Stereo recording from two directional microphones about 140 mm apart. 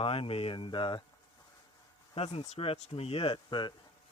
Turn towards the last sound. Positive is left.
turn(degrees=35)  # may be behind; listen again after turning